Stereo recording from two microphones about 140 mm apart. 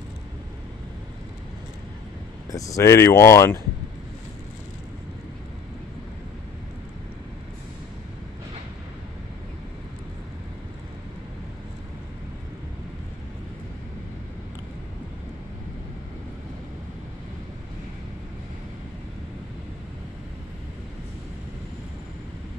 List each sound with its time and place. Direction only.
2.5 s speech: 25° left (ahead or behind)